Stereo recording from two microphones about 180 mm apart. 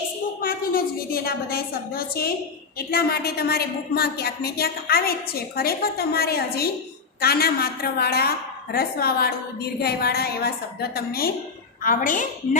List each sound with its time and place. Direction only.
0.4 s a woman's voice: 55° left (ahead or behind)